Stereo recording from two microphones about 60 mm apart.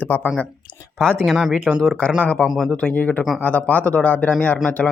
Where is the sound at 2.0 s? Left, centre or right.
Centre.